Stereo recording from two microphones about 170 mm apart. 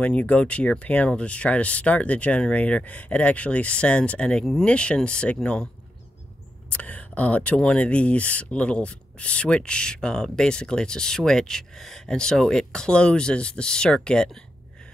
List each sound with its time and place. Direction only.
0.0 s speech: 10° left (ahead or behind)
6.7 s speech: 10° left (ahead or behind)